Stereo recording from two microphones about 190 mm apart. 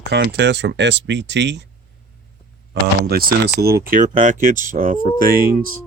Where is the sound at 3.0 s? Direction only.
55° right (ahead or behind).